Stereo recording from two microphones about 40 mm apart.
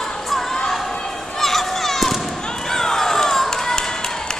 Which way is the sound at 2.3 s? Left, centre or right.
Centre.